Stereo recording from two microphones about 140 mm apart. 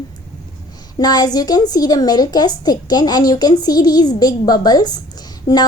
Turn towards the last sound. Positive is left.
turn(degrees=25)  # may be behind; listen again after turning